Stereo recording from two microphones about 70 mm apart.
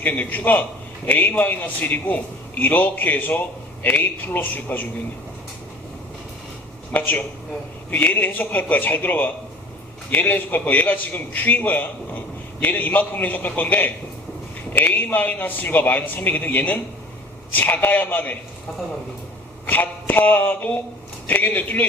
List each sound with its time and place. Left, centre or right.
0.0 s a man's voice: left
7.9 s a man's voice: left
19.6 s a man's voice: left